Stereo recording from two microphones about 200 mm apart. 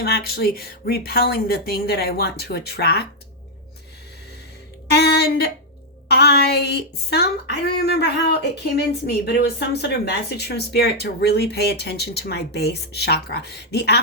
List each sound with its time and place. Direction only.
0.0 s speech: 50° left (ahead or behind)
4.9 s a sound: 55° left (ahead or behind)
6.1 s a woman's voice: 55° left (ahead or behind)